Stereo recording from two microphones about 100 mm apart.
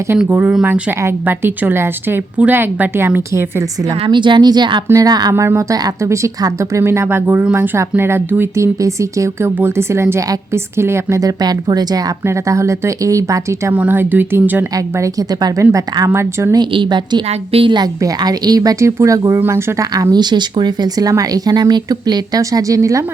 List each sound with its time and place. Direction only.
0.3 s a woman's voice: 20° right (ahead or behind)
4.0 s speech: 55° right (ahead or behind)
5.3 s a woman's voice: 25° right (ahead or behind); by 12.0 s 40° right (ahead or behind)
12.2 s speech: 30° right (ahead or behind)
13.7 s a woman's voice: 20° right (ahead or behind)
15.0 s speech: 40° right (ahead or behind)
16.6 s speech: 50° right (ahead or behind)
17.2 s a woman's voice: 75° right (ahead or behind)
17.7 s a woman's voice: 45° right (ahead or behind); by 19.9 s 25° right (ahead or behind)
19.9 s speech: 40° right (ahead or behind)